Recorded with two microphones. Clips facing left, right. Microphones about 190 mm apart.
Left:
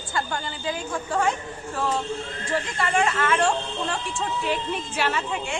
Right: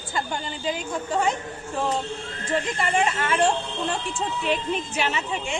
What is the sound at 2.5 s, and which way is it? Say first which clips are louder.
Speech: right 1 dB; 25° right (ahead or behind).